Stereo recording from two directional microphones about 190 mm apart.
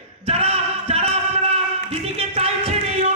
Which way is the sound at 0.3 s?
30° right (ahead or behind).